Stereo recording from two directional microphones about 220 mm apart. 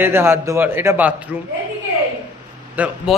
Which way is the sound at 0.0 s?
10° right (ahead or behind).